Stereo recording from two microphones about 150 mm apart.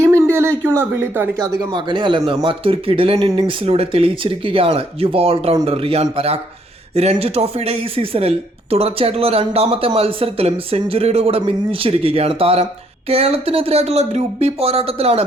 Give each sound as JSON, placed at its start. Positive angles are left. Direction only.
{"t": 0.0, "sound": "speech", "side_deg": -15}
{"t": 3.2, "sound": "speech", "side_deg": -25}